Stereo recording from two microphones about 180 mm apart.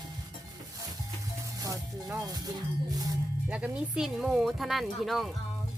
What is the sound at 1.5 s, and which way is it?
Music, 20° right (ahead or behind).